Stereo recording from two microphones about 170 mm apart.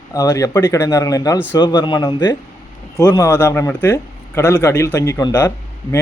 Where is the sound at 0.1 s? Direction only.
20° left (ahead or behind).